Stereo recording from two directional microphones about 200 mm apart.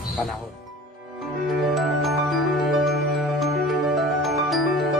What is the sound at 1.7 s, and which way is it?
Music, centre (ahead or behind).